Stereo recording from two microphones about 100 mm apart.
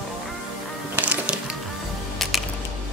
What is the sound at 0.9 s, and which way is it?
Music, 10° right (ahead or behind).